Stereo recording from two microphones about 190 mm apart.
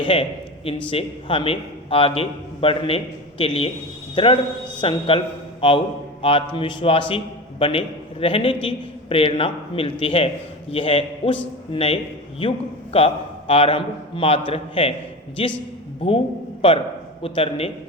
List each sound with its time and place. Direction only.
0.0 s a man's voice: 30° left (ahead or behind)
16.0 s a man's voice: 30° left (ahead or behind)